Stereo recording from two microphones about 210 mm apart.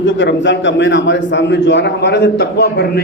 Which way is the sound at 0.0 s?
60° left (ahead or behind).